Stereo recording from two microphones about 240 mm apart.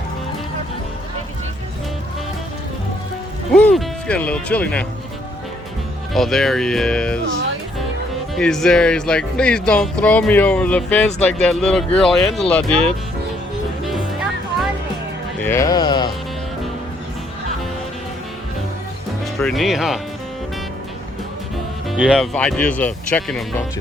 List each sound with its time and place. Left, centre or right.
3.5 s speech: centre
6.1 s speech: centre
8.4 s speech: centre
15.4 s speech: centre
19.2 s speech: centre
21.8 s speech: centre